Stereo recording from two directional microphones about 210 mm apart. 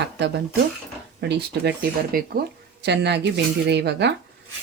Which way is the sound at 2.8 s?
55° right (ahead or behind).